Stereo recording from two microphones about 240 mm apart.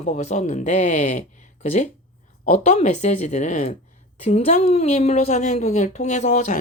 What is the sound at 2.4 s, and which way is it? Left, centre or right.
A woman's voice, left.